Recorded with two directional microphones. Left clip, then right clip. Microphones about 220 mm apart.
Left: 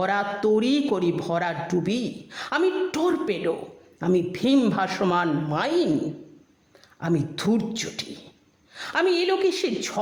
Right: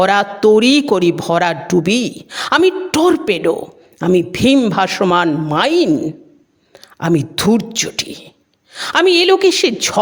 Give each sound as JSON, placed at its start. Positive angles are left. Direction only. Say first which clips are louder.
{"t": 0.0, "sound": "a man's voice", "louder": "right 12 dB", "side_deg": -35}
{"t": 7.0, "sound": "a man's voice", "louder": "right 10 dB", "side_deg": -40}